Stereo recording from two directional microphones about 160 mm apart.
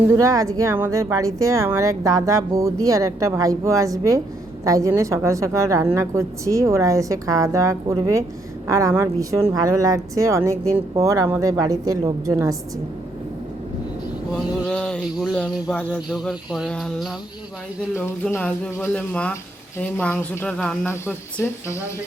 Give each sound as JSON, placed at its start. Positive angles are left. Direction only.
{"t": 0.1, "sound": "a woman's voice", "side_deg": -20}
{"t": 14.7, "sound": "speech", "side_deg": 5}
{"t": 15.7, "sound": "speech", "side_deg": 10}
{"t": 16.0, "sound": "speech", "side_deg": 0}